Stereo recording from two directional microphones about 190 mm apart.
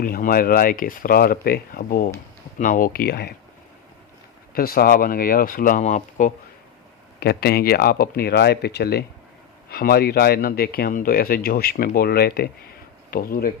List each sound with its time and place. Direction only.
0.0 s speech: 50° left (ahead or behind)
4.5 s speech: 50° left (ahead or behind)
7.2 s speech: 55° left (ahead or behind)